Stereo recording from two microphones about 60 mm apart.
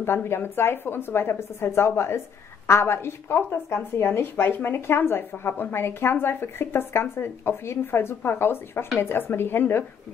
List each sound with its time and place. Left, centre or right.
0.0 s a woman's voice: left